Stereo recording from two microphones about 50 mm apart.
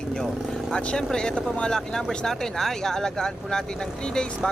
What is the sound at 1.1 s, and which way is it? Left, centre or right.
Speech, centre.